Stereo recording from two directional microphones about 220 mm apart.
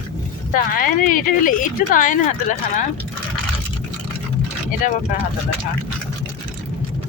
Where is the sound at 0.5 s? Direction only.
40° left (ahead or behind).